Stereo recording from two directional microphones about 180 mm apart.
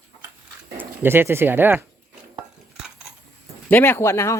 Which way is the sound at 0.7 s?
10° right (ahead or behind).